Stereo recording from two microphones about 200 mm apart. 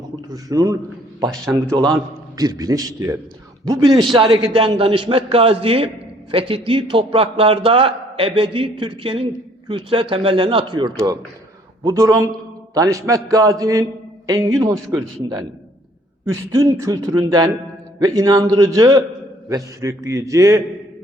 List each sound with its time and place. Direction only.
0.3 s a man's voice: 20° right (ahead or behind)